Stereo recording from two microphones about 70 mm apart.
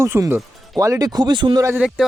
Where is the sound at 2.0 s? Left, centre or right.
Centre.